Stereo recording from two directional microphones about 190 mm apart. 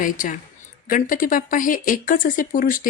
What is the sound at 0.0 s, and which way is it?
A man's voice, 45° left (ahead or behind).